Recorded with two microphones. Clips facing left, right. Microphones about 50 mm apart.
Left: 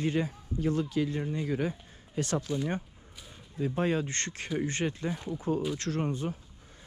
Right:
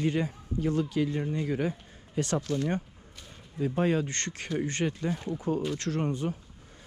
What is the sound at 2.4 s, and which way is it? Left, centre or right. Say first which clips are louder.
Speech: right 2 dB; centre.